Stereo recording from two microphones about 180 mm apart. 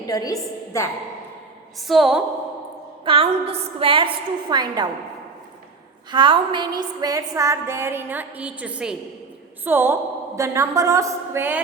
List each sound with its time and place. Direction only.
0.1 s a woman's voice: 20° left (ahead or behind)
1.9 s a woman's voice: centre (ahead or behind)
3.0 s a woman's voice: 30° right (ahead or behind)
6.1 s a woman's voice: 25° right (ahead or behind)